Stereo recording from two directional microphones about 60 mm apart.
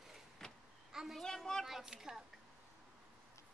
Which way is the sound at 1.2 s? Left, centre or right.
Centre.